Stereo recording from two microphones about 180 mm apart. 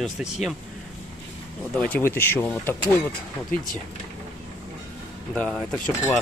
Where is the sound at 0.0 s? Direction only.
Centre (ahead or behind).